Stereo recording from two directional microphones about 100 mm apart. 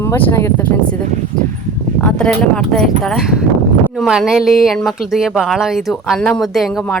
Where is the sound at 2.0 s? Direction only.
5° left (ahead or behind).